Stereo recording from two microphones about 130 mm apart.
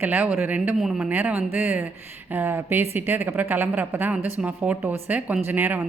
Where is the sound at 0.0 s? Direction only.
15° right (ahead or behind).